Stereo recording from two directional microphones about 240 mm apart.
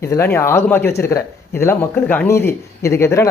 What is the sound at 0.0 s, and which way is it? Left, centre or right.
A man's voice, centre.